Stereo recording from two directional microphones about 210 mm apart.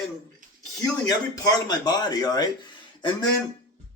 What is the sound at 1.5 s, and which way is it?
Speech, 20° left (ahead or behind).